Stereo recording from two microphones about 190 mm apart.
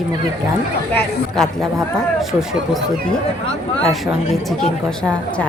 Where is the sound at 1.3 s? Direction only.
Centre (ahead or behind).